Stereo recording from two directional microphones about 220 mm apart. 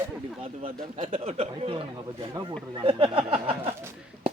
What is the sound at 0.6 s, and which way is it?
Speech, 25° right (ahead or behind).